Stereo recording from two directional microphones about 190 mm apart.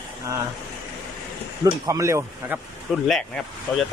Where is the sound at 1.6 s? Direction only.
15° right (ahead or behind).